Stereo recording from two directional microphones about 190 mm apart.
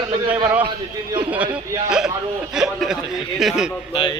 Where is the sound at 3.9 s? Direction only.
25° left (ahead or behind).